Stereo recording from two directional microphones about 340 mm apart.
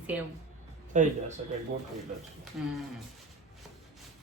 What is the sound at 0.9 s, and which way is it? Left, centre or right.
Speech, right.